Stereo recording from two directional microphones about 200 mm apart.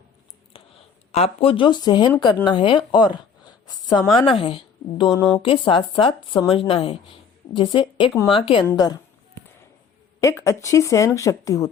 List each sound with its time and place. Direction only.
0.5 s a sound: 25° left (ahead or behind)
1.1 s a woman's voice: 30° left (ahead or behind)
10.2 s speech: 15° left (ahead or behind)